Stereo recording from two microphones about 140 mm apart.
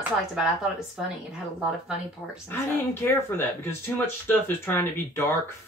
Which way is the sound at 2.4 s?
15° left (ahead or behind).